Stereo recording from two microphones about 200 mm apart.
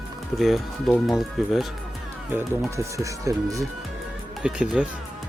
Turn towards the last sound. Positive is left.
turn(degrees=-5)  # may be behind; listen again after turning